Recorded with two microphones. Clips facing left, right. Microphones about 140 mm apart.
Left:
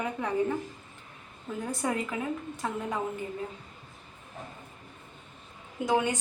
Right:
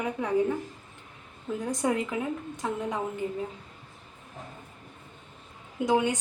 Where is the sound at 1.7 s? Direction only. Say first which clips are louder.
Right 3 dB; 15° right (ahead or behind).